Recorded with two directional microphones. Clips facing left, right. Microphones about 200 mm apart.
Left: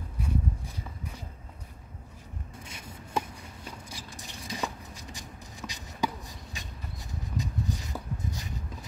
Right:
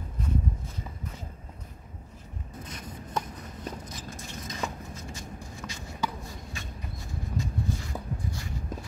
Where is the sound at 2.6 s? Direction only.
10° left (ahead or behind).